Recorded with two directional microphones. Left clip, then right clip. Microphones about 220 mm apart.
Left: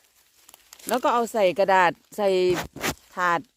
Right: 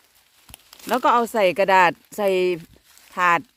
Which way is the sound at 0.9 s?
10° left (ahead or behind).